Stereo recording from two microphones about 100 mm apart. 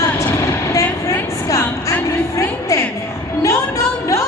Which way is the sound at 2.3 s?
30° left (ahead or behind).